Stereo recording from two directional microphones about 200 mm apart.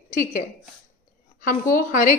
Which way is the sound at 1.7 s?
40° left (ahead or behind).